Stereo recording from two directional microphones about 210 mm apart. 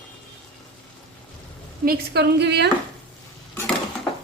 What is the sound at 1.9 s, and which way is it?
Speech, 50° right (ahead or behind).